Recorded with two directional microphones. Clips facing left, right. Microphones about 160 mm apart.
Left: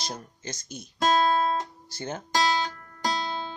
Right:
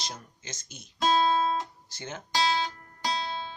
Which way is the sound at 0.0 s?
40° left (ahead or behind).